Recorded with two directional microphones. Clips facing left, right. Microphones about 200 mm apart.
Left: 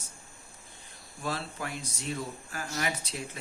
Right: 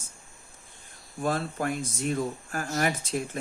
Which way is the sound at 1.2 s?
50° right (ahead or behind).